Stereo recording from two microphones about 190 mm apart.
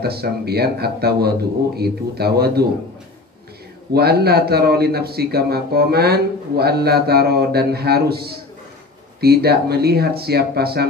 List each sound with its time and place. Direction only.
0.0 s a man's voice: 55° right (ahead or behind)
3.9 s a man's voice: 55° right (ahead or behind)